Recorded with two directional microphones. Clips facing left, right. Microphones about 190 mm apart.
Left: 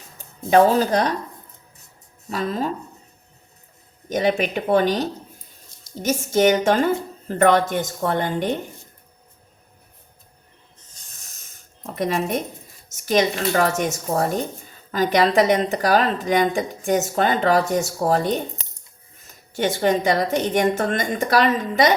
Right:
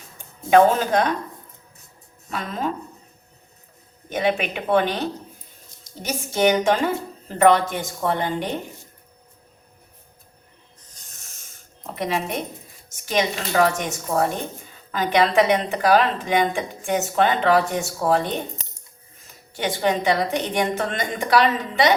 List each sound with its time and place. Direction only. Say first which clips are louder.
0.5 s speech: even; 35° left (ahead or behind)
2.3 s speech: left 3 dB; 35° left (ahead or behind)
4.1 s a woman's voice: left 2 dB; 40° left (ahead or behind)
11.9 s a woman's voice: left 3 dB; 45° left (ahead or behind)
19.5 s a woman's voice: left 3 dB; 45° left (ahead or behind)